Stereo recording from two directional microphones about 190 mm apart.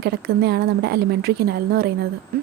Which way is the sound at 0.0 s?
60° right (ahead or behind).